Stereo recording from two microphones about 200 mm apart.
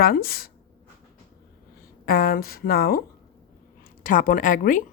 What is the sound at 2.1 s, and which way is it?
Speech, 45° left (ahead or behind).